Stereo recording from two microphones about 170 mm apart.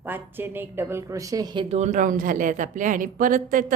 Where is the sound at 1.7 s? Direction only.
40° right (ahead or behind).